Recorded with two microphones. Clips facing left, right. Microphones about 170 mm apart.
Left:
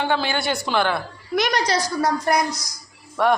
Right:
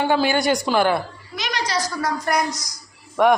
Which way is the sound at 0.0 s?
10° right (ahead or behind).